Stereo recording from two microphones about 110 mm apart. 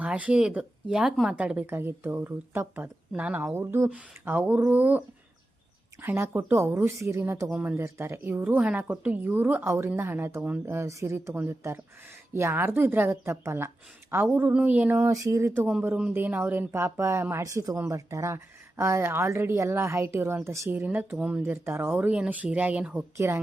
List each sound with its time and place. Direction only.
0.0 s speech: 10° right (ahead or behind)
1.6 s speech: 20° right (ahead or behind)
7.5 s speech: 10° right (ahead or behind)
7.8 s speech: 25° right (ahead or behind)
15.1 s speech: 30° right (ahead or behind); by 23.0 s 15° right (ahead or behind)
23.1 s speech: 25° right (ahead or behind)